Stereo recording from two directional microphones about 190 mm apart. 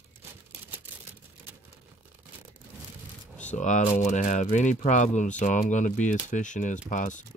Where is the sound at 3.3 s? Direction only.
40° left (ahead or behind).